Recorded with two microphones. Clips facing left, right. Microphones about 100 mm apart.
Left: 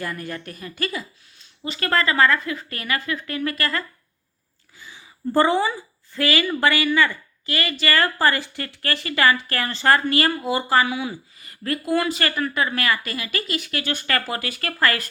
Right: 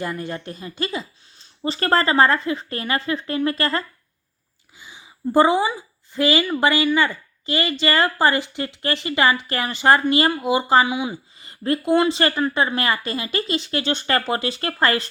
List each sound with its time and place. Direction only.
0.0 s a woman's voice: 20° right (ahead or behind)
4.8 s a woman's voice: 20° right (ahead or behind)